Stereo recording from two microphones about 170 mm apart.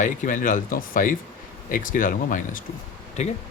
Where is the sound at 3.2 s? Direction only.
40° left (ahead or behind).